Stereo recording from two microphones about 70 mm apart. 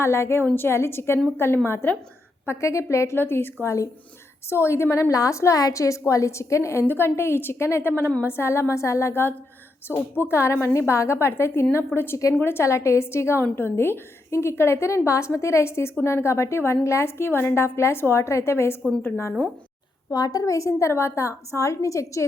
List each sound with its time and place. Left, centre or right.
0.0 s a woman's voice: left
3.2 s a woman's voice: left
6.8 s a woman's voice: left
20.1 s a woman's voice: left